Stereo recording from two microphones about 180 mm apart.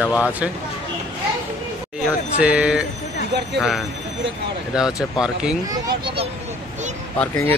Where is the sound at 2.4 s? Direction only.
5° right (ahead or behind).